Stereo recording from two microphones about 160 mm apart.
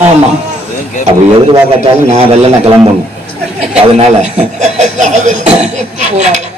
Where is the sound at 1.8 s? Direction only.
40° right (ahead or behind).